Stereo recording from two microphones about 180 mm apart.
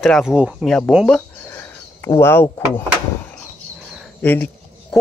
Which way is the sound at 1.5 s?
15° left (ahead or behind).